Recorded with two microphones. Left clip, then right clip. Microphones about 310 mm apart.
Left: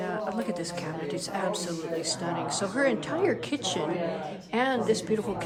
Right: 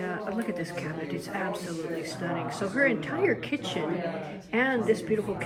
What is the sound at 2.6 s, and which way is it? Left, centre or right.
Speech, centre.